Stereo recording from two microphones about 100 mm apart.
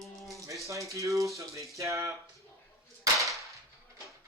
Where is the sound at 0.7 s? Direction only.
30° right (ahead or behind).